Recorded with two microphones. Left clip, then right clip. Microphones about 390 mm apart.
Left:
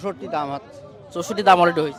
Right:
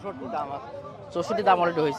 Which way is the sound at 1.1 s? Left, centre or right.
Centre.